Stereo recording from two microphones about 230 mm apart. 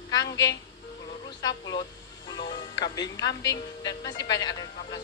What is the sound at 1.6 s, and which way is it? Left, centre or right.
Speech, centre.